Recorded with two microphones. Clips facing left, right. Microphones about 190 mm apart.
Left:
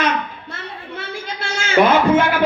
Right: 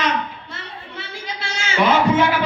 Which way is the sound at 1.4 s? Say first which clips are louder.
Left 5 dB; 50° left (ahead or behind).